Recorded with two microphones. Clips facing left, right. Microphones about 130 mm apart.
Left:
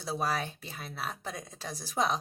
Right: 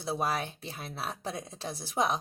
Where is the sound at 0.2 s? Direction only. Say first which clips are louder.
Right 1 dB; 20° right (ahead or behind).